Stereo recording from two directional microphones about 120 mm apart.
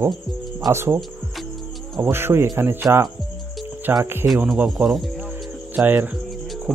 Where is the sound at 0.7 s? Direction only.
20° right (ahead or behind).